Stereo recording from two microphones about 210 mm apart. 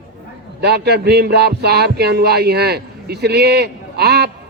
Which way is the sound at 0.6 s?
50° right (ahead or behind).